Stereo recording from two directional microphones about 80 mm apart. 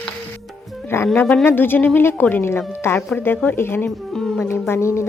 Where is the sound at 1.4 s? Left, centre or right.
Left.